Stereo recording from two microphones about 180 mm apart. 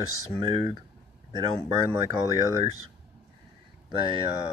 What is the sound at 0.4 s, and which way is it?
Speech, 20° right (ahead or behind).